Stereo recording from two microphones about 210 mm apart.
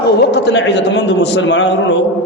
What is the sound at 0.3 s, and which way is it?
A man's voice, 55° left (ahead or behind).